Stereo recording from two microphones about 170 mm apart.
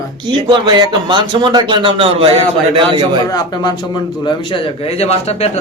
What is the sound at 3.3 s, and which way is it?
Speech, 20° left (ahead or behind).